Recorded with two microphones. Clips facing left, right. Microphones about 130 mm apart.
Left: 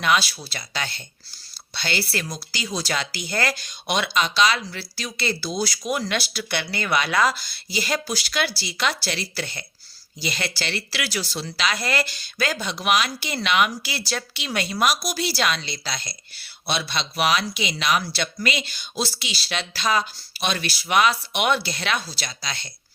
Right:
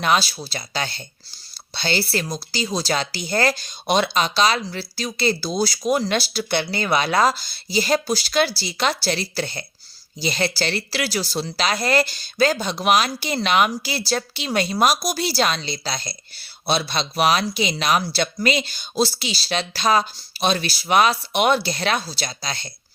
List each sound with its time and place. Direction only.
0.0 s speech: 35° right (ahead or behind)